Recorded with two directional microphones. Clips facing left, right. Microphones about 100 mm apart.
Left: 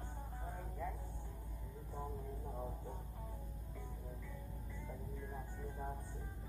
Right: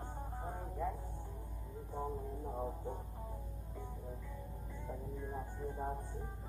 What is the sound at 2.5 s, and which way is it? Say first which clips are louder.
Music: right 7 dB; 35° right (ahead or behind).